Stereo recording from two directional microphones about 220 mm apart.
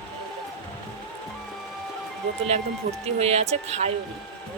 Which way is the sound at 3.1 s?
30° right (ahead or behind).